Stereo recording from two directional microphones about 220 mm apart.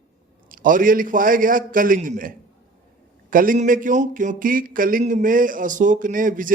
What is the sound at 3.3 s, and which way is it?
Speech, 40° right (ahead or behind).